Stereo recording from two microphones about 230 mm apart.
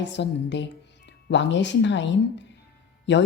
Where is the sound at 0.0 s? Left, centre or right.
Left.